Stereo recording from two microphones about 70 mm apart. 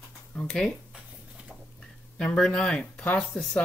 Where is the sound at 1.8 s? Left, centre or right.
Centre.